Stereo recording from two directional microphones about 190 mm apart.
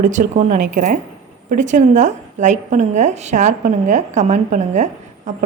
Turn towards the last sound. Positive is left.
turn(degrees=-40)  # may be behind; listen again after turning